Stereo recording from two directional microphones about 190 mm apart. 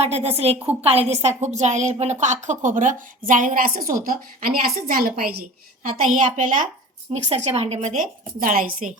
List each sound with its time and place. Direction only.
0.0 s a woman's voice: 35° right (ahead or behind)